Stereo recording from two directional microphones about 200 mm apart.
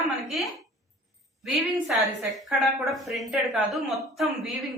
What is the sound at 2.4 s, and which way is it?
A woman's voice, centre (ahead or behind).